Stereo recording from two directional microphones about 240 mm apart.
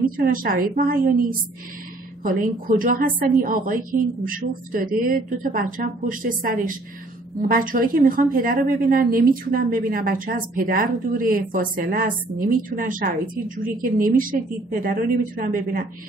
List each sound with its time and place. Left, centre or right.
0.0 s a woman's voice: right